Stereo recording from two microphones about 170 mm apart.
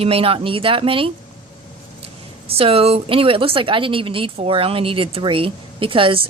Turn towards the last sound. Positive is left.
turn(degrees=-30)  # may be behind; listen again after turning